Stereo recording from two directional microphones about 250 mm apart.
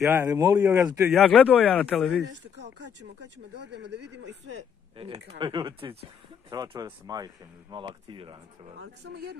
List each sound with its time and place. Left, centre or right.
0.0 s a man's voice: centre
3.5 s speech: right
4.9 s a man's voice: right
8.7 s speech: right